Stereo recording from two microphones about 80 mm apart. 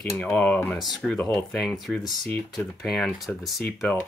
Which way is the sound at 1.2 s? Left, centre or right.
Centre.